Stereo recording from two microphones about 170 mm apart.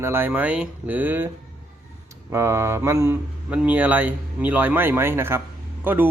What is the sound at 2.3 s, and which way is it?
A man's voice, 15° right (ahead or behind).